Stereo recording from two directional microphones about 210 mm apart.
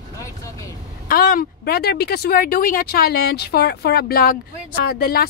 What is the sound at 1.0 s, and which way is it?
Speech, 45° left (ahead or behind).